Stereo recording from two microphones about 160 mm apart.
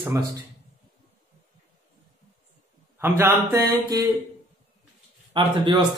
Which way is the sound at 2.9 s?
15° right (ahead or behind).